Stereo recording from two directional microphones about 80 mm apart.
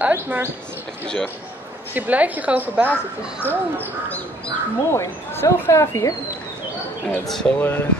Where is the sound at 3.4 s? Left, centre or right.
Left.